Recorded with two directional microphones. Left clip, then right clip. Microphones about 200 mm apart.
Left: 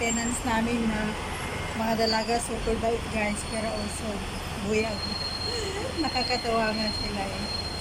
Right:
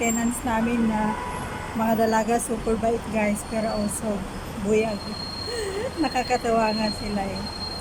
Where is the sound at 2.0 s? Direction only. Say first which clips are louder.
Right 4 dB; 20° right (ahead or behind).